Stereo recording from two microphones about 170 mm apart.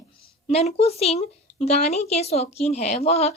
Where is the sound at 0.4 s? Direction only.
35° left (ahead or behind).